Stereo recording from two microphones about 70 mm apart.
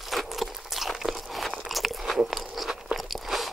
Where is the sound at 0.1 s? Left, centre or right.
Centre.